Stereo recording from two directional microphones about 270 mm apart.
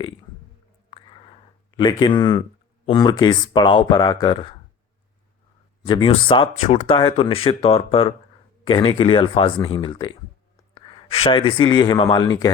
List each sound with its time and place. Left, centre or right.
1.7 s speech: centre
5.8 s speech: centre